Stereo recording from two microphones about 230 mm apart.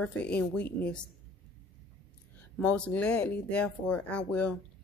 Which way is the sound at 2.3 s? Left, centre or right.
Centre.